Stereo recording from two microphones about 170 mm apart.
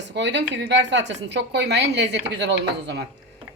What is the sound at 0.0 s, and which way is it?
Speech, 90° right.